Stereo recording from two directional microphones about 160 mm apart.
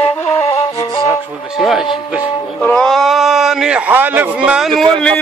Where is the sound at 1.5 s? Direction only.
Centre (ahead or behind).